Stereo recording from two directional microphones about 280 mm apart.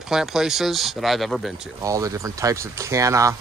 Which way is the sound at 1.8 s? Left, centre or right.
Centre.